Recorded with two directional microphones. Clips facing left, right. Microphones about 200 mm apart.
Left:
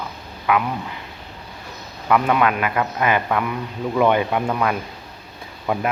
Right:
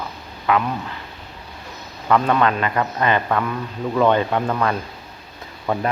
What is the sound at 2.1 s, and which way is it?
A man's voice, 10° left (ahead or behind).